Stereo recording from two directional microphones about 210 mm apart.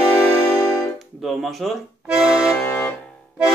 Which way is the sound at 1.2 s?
Centre (ahead or behind).